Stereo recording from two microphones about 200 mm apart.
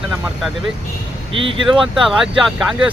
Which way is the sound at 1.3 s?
70° right (ahead or behind).